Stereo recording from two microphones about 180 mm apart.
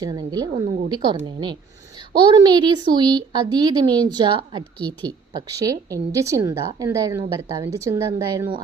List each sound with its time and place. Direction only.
0.0 s a woman's voice: 20° right (ahead or behind)